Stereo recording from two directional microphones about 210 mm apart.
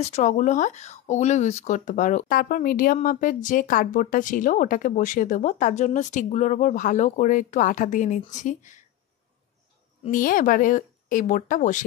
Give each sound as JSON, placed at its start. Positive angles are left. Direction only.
{"t": 0.0, "sound": "speech", "side_deg": 35}
{"t": 10.1, "sound": "speech", "side_deg": 40}